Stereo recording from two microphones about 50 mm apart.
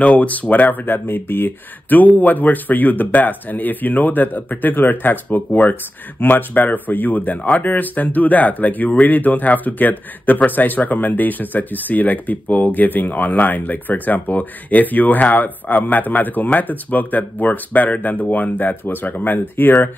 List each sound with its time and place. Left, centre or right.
0.0 s speech: left